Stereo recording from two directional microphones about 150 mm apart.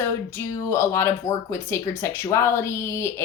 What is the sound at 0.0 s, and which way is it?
Speech, 20° left (ahead or behind).